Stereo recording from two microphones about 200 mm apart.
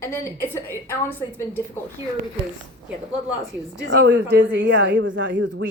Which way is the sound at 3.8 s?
60° right (ahead or behind).